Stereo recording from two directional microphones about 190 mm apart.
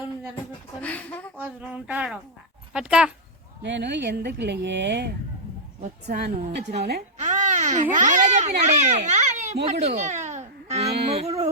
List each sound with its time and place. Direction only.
0.8 s a sound: 5° left (ahead or behind)
1.4 s speech: 10° right (ahead or behind)
3.6 s speech: 65° right (ahead or behind)
6.1 s speech: 60° right (ahead or behind)
7.2 s a child's voice: 40° right (ahead or behind)
9.6 s a sound: 35° right (ahead or behind)
11.1 s music: 35° right (ahead or behind)